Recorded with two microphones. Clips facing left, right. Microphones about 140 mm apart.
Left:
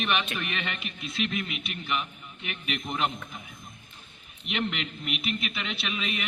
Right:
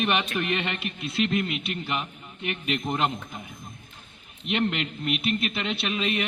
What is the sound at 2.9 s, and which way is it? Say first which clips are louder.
Speech: right 1 dB; 40° right (ahead or behind).